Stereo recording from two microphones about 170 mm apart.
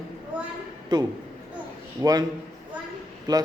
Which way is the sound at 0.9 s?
25° right (ahead or behind).